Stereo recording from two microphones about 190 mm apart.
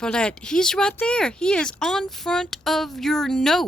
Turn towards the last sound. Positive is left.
turn(degrees=0)  # may be behind; listen again after turning